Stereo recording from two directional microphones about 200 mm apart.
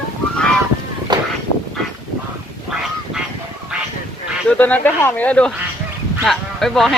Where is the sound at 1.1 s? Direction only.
20° right (ahead or behind).